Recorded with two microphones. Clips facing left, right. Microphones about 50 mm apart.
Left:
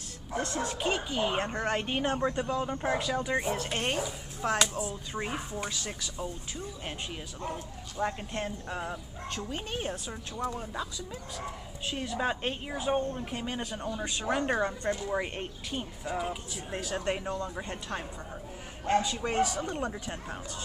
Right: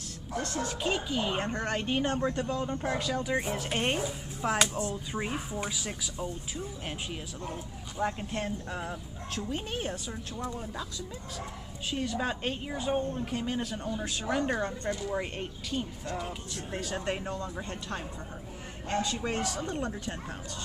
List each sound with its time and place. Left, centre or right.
0.3 s speech: left
0.7 s speech: centre
0.9 s speech: centre
3.6 s speech: centre
10.3 s speech: centre
11.9 s speech: centre
17.6 s speech: centre